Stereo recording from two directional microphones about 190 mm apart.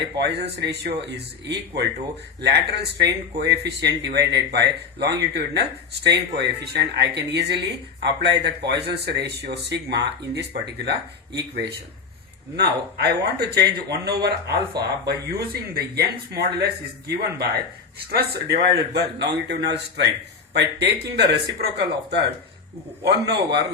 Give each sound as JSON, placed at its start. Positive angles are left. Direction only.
{"t": 0.0, "sound": "speech", "side_deg": -65}
{"t": 18.1, "sound": "speech", "side_deg": -60}